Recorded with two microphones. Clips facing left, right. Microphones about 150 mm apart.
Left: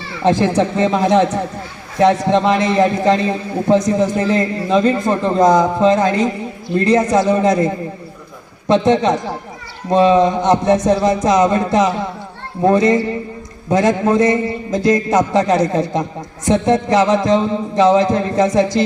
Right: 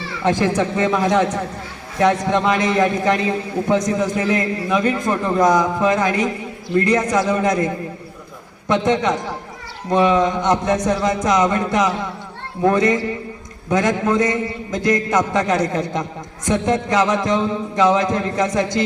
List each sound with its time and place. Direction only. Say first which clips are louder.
0.2 s a man's voice: left 4 dB; 25° left (ahead or behind)